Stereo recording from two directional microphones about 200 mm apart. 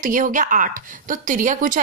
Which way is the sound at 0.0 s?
40° right (ahead or behind).